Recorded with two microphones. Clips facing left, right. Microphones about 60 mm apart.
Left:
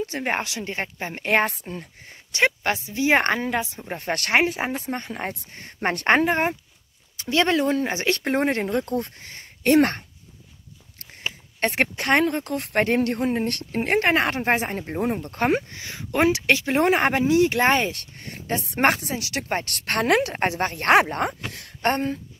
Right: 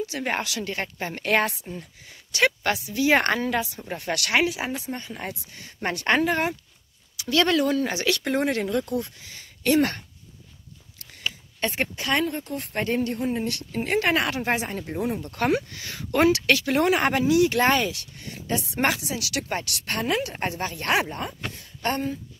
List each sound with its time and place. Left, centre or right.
0.2 s speech: left
1.4 s speech: left
1.8 s a woman's voice: left
11.0 s a sound: left
11.6 s speech: left
17.9 s a woman's voice: left
19.7 s a woman's voice: left
21.8 s a woman's voice: left